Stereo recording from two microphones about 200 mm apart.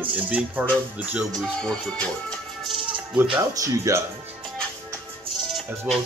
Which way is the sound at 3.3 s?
15° right (ahead or behind).